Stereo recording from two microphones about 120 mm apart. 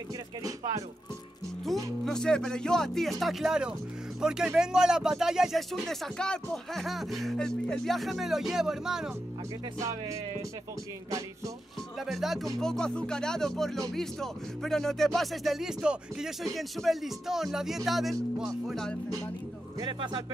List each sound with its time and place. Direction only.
2.0 s speech: 5° left (ahead or behind)
9.8 s music: 25° right (ahead or behind)
12.1 s speech: centre (ahead or behind)
19.8 s speech: 40° right (ahead or behind)